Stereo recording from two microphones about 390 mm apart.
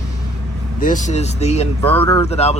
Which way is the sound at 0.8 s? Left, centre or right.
Centre.